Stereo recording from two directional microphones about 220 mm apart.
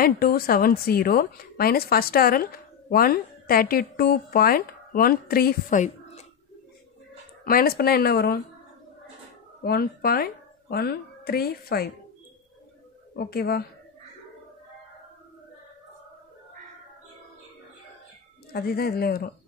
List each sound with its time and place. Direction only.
0.0 s a woman's voice: 40° left (ahead or behind)
7.4 s a woman's voice: 45° left (ahead or behind)
9.6 s speech: 45° left (ahead or behind)
13.1 s a woman's voice: 45° left (ahead or behind)
18.5 s a woman's voice: 45° left (ahead or behind)